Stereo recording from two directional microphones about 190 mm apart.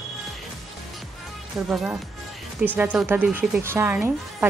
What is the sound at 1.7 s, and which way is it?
A woman's voice, 5° right (ahead or behind).